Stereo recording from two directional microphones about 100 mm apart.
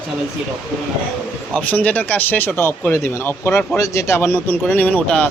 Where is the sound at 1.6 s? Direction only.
15° left (ahead or behind).